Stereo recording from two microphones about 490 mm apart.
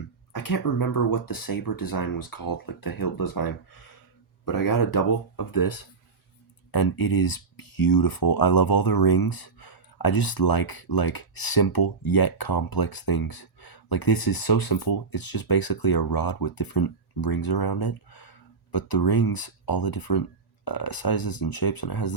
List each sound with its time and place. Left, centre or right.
0.3 s speech: left